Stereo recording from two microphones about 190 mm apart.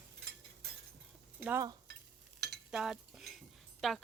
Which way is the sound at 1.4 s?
10° right (ahead or behind).